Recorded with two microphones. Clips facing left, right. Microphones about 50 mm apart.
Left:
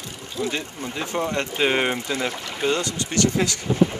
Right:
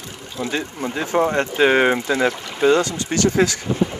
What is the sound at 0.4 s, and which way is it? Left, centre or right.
Speech, right.